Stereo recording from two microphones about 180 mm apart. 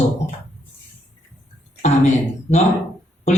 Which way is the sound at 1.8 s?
40° left (ahead or behind).